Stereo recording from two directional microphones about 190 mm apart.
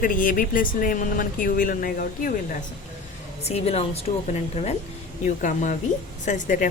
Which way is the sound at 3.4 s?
35° left (ahead or behind).